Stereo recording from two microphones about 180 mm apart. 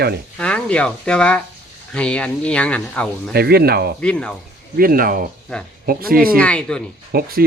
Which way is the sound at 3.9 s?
5° left (ahead or behind).